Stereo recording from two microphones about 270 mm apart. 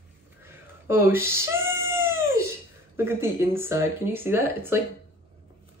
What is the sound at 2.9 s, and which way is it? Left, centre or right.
Speech, centre.